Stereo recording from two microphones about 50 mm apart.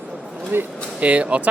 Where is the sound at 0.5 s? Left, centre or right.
Right.